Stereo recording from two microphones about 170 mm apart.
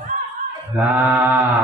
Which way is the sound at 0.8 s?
10° right (ahead or behind).